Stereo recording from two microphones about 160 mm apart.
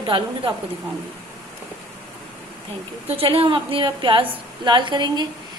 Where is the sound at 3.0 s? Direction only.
35° right (ahead or behind).